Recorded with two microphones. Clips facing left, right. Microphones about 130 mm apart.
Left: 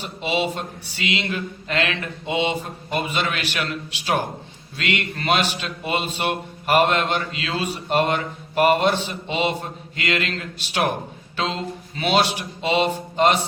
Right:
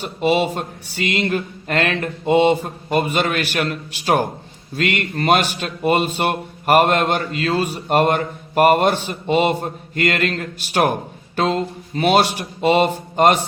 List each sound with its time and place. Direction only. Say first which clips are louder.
0.0 s speech: right 6 dB; 50° right (ahead or behind)